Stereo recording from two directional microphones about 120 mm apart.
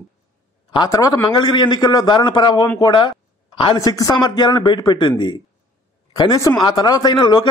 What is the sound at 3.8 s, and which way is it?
A man's voice, 30° left (ahead or behind).